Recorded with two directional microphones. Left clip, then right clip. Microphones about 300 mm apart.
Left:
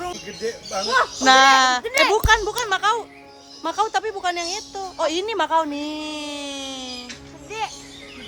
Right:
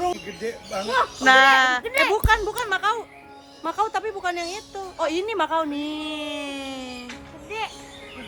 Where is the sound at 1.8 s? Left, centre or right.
Left; by 7.0 s centre.